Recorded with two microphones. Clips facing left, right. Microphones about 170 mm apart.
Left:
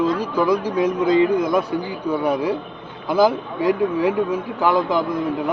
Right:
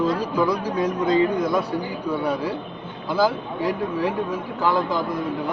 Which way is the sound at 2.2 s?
15° left (ahead or behind).